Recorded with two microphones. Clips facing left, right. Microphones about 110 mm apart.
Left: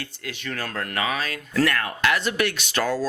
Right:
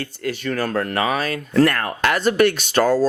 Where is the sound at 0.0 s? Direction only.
40° right (ahead or behind).